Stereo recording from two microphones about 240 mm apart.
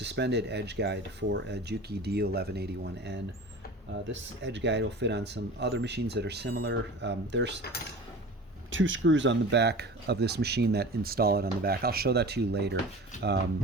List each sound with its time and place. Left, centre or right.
0.0 s speech: right
8.7 s speech: right